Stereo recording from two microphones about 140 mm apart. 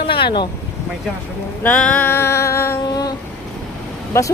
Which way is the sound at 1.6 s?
10° left (ahead or behind).